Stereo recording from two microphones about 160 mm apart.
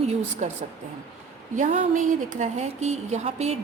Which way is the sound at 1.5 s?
50° right (ahead or behind).